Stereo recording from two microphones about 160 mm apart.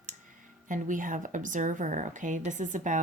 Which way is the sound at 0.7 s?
55° right (ahead or behind).